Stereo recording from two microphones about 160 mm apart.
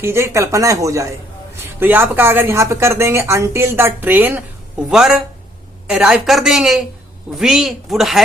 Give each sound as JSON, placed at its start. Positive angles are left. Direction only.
{"t": 0.0, "sound": "a woman's voice", "side_deg": -15}